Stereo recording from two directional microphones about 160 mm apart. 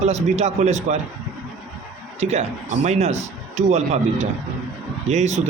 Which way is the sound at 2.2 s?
45° right (ahead or behind).